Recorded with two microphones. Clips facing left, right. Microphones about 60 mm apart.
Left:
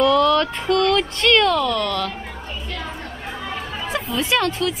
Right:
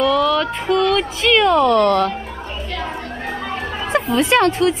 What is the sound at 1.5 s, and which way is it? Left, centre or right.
Speech, right.